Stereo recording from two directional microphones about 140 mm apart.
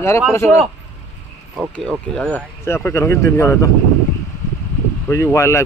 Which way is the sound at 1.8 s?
5° left (ahead or behind).